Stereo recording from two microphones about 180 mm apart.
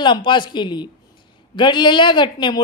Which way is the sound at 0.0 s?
25° left (ahead or behind).